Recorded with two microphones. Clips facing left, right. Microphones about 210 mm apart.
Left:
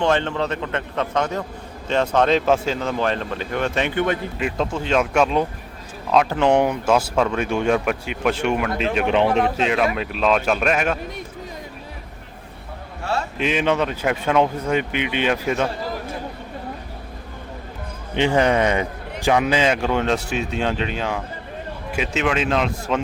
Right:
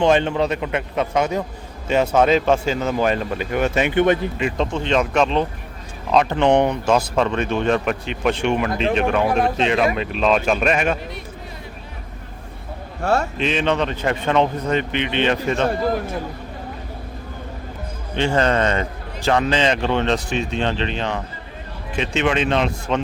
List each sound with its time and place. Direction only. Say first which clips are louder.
0.0 s speech: right 3 dB; 15° right (ahead or behind)
3.9 s speech: right 8 dB; 20° right (ahead or behind)
4.4 s a man's voice: right 2 dB; 5° left (ahead or behind)
9.2 s speech: even; 10° right (ahead or behind)
9.6 s speech: right 2 dB; 5° left (ahead or behind)
13.0 s a man's voice: right 5 dB; 50° right (ahead or behind)
13.4 s a man's voice: even; 10° left (ahead or behind)
18.1 s a man's voice: left 1 dB; 15° left (ahead or behind)